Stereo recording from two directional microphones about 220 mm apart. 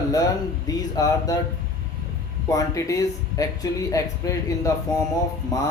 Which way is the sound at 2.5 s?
15° left (ahead or behind).